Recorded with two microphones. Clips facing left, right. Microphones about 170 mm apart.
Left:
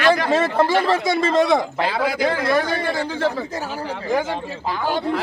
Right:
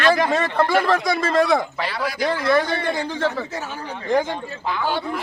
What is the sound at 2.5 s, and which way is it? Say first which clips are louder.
Speech: even; 10° left (ahead or behind).